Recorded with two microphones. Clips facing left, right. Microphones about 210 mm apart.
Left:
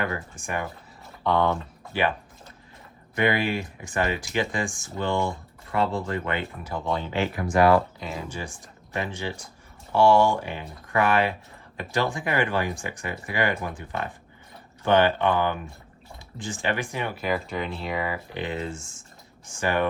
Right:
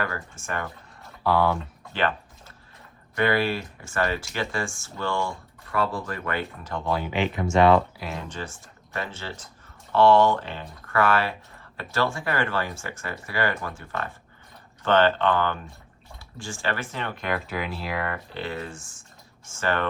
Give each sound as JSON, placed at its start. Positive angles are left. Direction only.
{"t": 0.0, "sound": "speech", "side_deg": 15}
{"t": 1.2, "sound": "speech", "side_deg": -5}
{"t": 1.9, "sound": "speech", "side_deg": 10}
{"t": 3.2, "sound": "speech", "side_deg": 15}
{"t": 6.7, "sound": "speech", "side_deg": 0}
{"t": 7.1, "sound": "speech", "side_deg": -20}
{"t": 7.9, "sound": "speech", "side_deg": 0}
{"t": 18.3, "sound": "speech", "side_deg": 20}
{"t": 19.5, "sound": "speech", "side_deg": 15}